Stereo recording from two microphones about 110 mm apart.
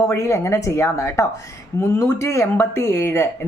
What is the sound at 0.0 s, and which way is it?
Speech, 25° left (ahead or behind).